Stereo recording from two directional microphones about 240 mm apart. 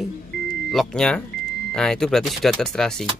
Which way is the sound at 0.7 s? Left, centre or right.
Centre.